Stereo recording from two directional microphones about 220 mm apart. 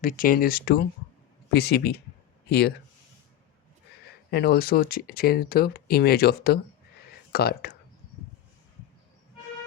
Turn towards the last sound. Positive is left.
turn(degrees=45)  # may be behind; listen again after turning